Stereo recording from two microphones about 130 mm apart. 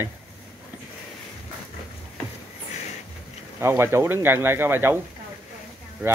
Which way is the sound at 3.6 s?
20° right (ahead or behind).